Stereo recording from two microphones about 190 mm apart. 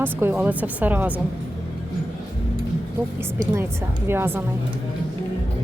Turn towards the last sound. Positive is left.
turn(degrees=-10)  # may be behind; listen again after turning